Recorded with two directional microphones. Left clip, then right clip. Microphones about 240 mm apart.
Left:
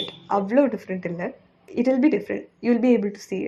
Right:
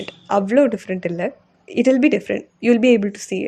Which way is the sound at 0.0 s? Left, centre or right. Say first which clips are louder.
Right 4 dB; right.